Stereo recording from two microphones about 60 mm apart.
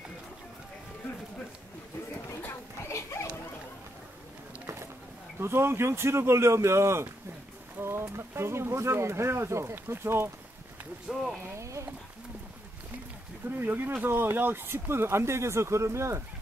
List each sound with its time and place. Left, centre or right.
2.9 s a sound: left
5.4 s speech: right
11.4 s speech: right
13.5 s speech: right